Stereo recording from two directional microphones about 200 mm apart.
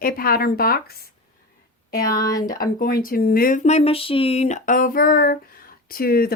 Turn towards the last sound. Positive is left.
turn(degrees=50)  # may be behind; listen again after turning